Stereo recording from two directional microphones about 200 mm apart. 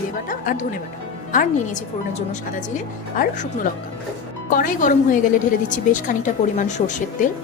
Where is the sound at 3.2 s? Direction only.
40° left (ahead or behind).